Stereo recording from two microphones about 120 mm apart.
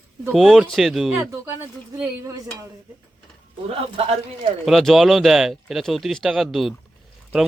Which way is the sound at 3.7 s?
55° right (ahead or behind).